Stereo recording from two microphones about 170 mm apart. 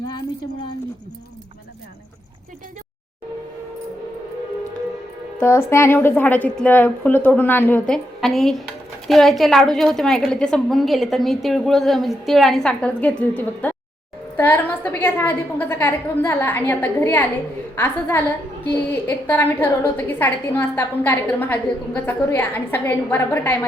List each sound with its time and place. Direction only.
5.4 s a woman's voice: 15° left (ahead or behind)